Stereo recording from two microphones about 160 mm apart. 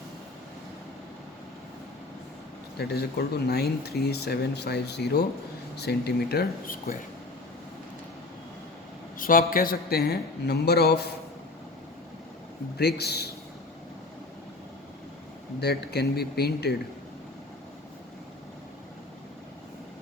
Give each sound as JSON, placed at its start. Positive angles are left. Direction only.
{"t": 2.7, "sound": "speech", "side_deg": 85}
{"t": 9.1, "sound": "a man's voice", "side_deg": 60}
{"t": 12.7, "sound": "a man's voice", "side_deg": 90}
{"t": 15.6, "sound": "speech", "side_deg": 90}